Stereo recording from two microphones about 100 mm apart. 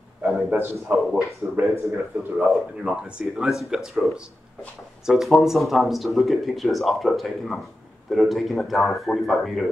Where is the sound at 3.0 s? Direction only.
5° right (ahead or behind).